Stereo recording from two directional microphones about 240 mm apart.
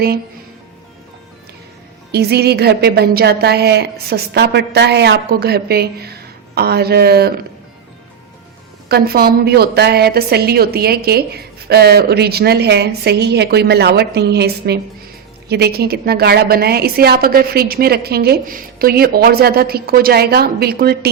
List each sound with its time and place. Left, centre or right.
2.1 s a woman's voice: right
8.9 s a woman's voice: right